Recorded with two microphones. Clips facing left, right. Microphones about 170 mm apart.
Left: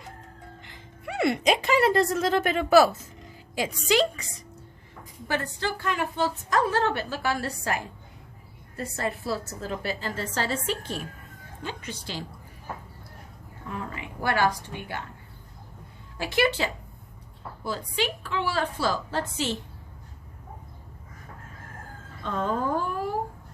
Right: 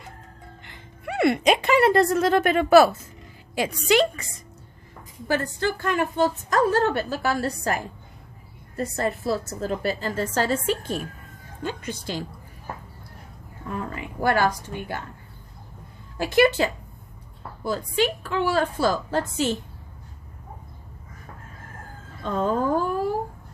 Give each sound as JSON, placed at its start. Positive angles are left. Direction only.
{"t": 0.6, "sound": "a woman's voice", "side_deg": -60}
{"t": 13.7, "sound": "a woman's voice", "side_deg": -45}
{"t": 16.1, "sound": "a woman's voice", "side_deg": -45}
{"t": 17.7, "sound": "a woman's voice", "side_deg": -45}
{"t": 22.2, "sound": "speech", "side_deg": -40}